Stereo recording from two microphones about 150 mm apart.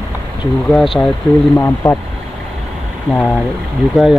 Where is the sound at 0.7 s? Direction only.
Centre (ahead or behind).